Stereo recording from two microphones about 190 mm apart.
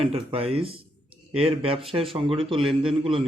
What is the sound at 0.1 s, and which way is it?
Speech, 30° right (ahead or behind).